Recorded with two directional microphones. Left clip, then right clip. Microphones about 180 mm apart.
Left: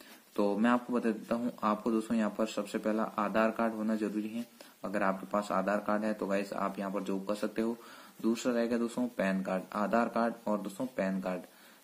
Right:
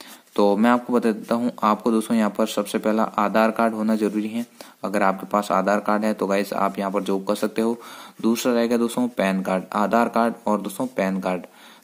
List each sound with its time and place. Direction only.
0.4 s speech: 40° right (ahead or behind)